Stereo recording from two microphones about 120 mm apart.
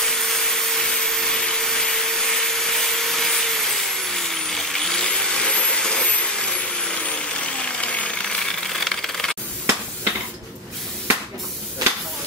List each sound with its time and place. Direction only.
0.0 s wood: 5° left (ahead or behind)
0.8 s vacuum cleaner: 5° left (ahead or behind)
7.6 s a sound: 10° left (ahead or behind)